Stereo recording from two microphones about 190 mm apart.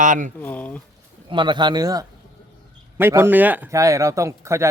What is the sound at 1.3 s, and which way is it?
A man's voice, 25° right (ahead or behind).